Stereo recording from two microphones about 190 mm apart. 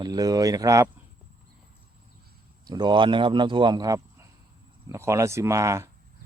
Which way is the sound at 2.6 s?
20° right (ahead or behind).